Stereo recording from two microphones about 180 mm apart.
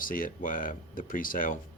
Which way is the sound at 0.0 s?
50° left (ahead or behind).